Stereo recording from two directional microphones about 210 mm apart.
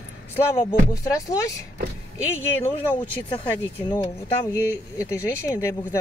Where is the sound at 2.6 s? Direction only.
25° left (ahead or behind).